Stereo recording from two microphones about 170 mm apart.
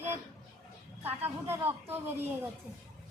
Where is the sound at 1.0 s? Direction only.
10° right (ahead or behind).